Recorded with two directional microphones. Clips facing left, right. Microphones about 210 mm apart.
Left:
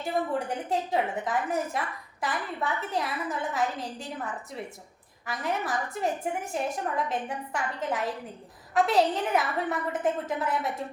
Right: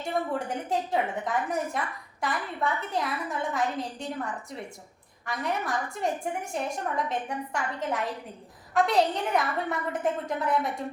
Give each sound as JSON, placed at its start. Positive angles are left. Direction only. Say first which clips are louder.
{"t": 0.0, "sound": "a woman's voice", "louder": "left 1 dB", "side_deg": 0}
{"t": 5.2, "sound": "a woman's voice", "louder": "even", "side_deg": 0}